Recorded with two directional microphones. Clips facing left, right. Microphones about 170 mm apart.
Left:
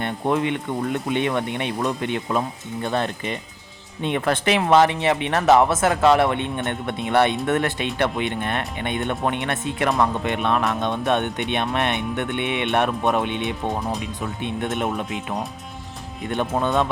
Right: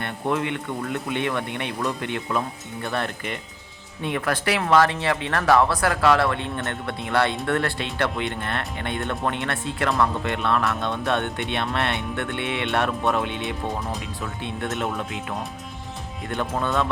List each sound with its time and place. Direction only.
0.0 s speech: 20° left (ahead or behind)